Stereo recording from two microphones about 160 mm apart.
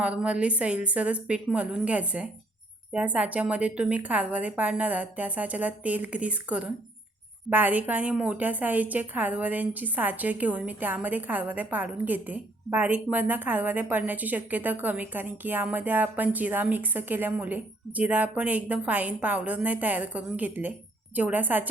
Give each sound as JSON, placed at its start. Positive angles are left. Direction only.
{"t": 0.0, "sound": "a woman's voice", "side_deg": -10}